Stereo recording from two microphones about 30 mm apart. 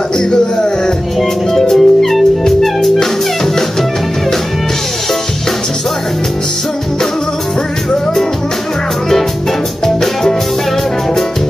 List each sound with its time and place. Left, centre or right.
0.3 s speech: left
1.5 s music: centre